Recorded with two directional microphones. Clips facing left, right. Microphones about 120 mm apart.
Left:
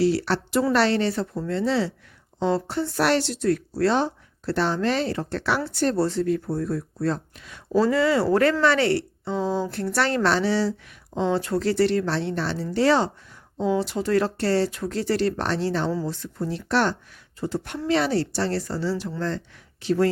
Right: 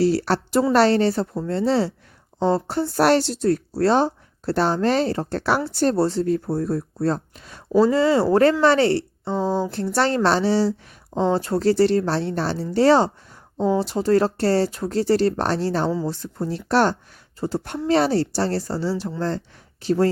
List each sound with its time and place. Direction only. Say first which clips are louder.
0.0 s speech: right 2 dB; 40° right (ahead or behind)
7.7 s speech: right 3 dB; 25° right (ahead or behind)